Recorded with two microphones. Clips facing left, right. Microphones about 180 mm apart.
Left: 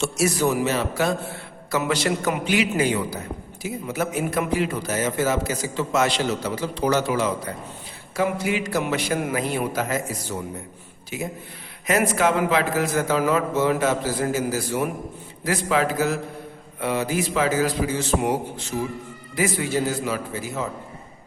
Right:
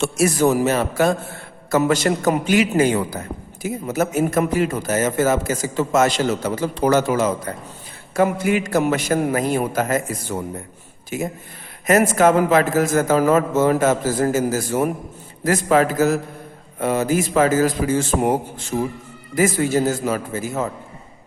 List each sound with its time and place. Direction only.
0.0 s a man's voice: 50° right (ahead or behind)